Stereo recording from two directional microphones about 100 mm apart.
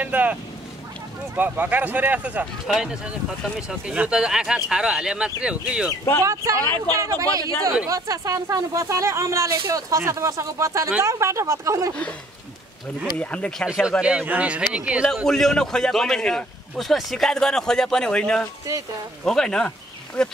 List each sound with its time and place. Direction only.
0.0 s a man's voice: 15° right (ahead or behind)
5.9 s speech: 25° left (ahead or behind)
6.9 s speech: 35° right (ahead or behind)
13.2 s speech: 10° left (ahead or behind)
14.0 s speech: 15° right (ahead or behind)
15.2 s a man's voice: 5° left (ahead or behind)